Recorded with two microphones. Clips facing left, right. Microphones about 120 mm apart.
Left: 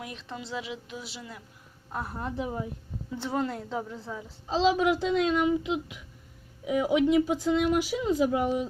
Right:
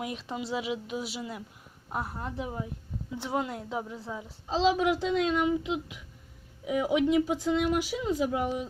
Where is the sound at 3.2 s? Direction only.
10° right (ahead or behind).